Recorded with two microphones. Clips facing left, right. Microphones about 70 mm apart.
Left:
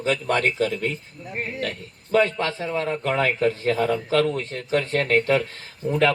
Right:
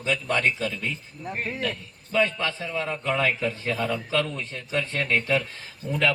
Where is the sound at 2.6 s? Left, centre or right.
Left.